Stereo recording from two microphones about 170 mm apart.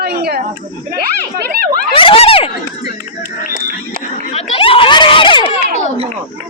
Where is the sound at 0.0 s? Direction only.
65° right (ahead or behind).